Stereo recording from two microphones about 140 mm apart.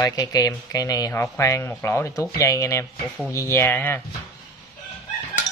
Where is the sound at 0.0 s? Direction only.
25° left (ahead or behind).